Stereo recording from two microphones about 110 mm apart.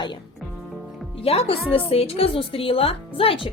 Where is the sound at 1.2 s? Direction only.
60° left (ahead or behind).